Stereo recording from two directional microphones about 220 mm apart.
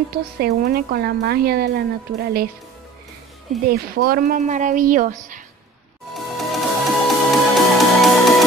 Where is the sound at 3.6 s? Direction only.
45° right (ahead or behind).